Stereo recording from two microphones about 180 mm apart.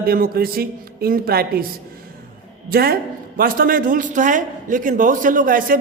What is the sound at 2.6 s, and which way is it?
A man's voice, 55° right (ahead or behind).